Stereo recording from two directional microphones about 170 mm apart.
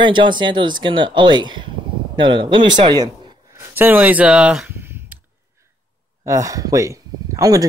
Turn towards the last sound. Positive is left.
turn(degrees=-20)  # may be behind; listen again after turning